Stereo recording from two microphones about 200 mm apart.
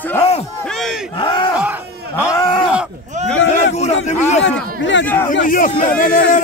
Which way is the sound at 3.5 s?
35° left (ahead or behind).